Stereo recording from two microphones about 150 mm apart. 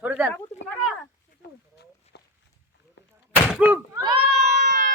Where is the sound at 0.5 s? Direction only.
50° left (ahead or behind).